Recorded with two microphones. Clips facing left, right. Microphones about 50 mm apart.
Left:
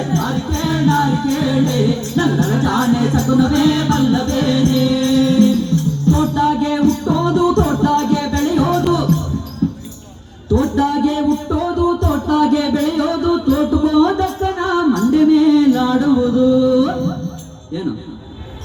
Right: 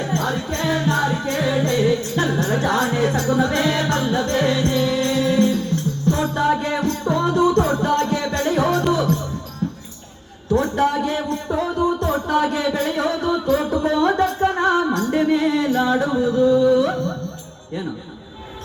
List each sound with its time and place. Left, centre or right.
0.1 s music: right
10.5 s a sound: right
13.8 s music: right